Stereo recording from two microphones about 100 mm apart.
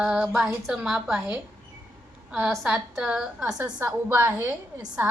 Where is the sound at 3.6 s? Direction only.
20° right (ahead or behind).